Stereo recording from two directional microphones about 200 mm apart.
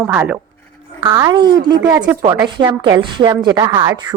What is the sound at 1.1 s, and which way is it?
A woman's voice, 20° right (ahead or behind).